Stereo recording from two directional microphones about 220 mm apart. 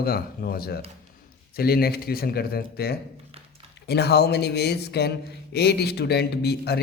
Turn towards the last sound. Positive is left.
turn(degrees=45)  # may be behind; listen again after turning